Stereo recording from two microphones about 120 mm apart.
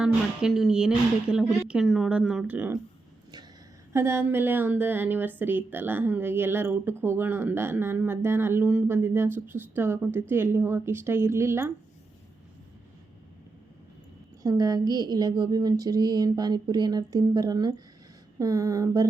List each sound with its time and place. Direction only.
0.0 s speech: 5° right (ahead or behind)
3.9 s a woman's voice: 20° right (ahead or behind)
14.4 s a woman's voice: 30° right (ahead or behind)